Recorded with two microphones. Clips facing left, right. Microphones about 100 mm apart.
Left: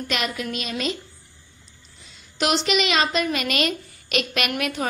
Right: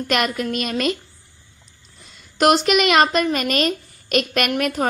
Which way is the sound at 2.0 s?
50° right (ahead or behind).